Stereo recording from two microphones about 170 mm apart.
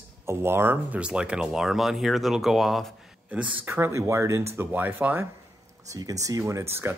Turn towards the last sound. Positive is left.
turn(degrees=-15)  # may be behind; listen again after turning